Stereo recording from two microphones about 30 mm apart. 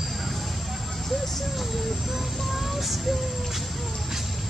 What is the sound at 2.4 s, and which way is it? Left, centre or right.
Speech, centre.